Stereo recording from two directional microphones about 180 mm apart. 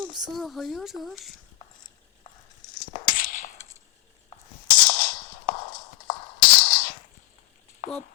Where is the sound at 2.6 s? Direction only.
25° left (ahead or behind).